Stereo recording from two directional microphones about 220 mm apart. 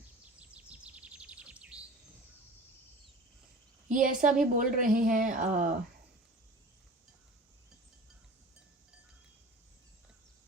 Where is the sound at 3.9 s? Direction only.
35° right (ahead or behind).